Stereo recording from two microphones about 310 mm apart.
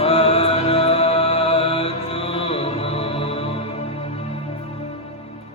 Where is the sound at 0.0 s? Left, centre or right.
Centre.